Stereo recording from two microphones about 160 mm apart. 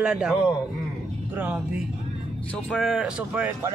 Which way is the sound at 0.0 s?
5° right (ahead or behind).